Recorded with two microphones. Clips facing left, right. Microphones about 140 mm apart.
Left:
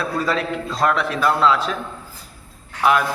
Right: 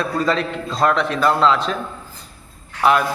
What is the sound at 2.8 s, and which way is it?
Speech, 5° left (ahead or behind).